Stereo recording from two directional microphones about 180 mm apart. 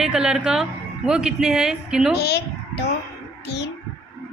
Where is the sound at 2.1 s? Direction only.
60° left (ahead or behind).